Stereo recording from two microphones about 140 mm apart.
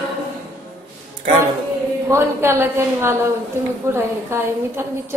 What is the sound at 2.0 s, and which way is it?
A woman's voice, 15° right (ahead or behind).